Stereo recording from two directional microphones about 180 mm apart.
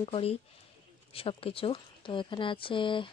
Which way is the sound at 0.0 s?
35° left (ahead or behind).